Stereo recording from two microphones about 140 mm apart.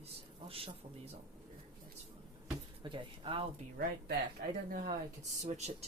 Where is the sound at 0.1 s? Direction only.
40° right (ahead or behind).